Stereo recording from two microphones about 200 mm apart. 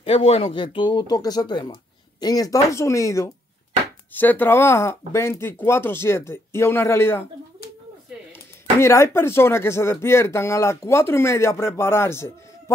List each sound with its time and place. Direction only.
0.0 s speech: 30° left (ahead or behind); by 7.2 s 10° left (ahead or behind)
8.7 s speech: 15° left (ahead or behind)